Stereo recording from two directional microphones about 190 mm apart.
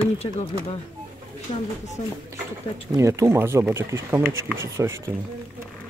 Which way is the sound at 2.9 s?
15° right (ahead or behind).